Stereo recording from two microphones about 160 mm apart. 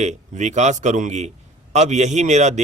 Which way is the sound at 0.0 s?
45° right (ahead or behind).